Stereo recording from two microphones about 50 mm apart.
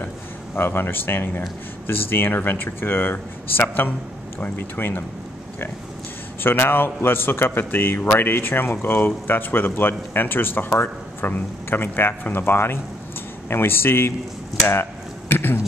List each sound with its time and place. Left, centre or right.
0.6 s speech: left
6.4 s speech: left